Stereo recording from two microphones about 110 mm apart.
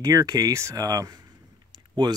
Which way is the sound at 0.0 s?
35° right (ahead or behind).